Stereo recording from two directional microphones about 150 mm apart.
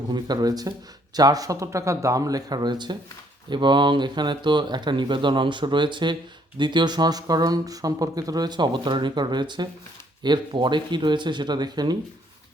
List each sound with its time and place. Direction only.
0.1 s speech: 25° right (ahead or behind)